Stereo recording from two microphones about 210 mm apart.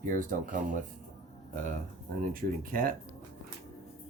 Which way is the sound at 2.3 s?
40° right (ahead or behind).